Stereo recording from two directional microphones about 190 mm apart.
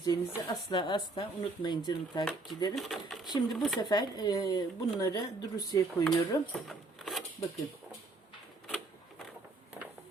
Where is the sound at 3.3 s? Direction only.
20° left (ahead or behind).